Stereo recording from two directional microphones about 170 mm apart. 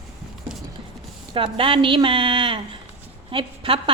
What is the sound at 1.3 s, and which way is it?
A woman's voice, 30° right (ahead or behind).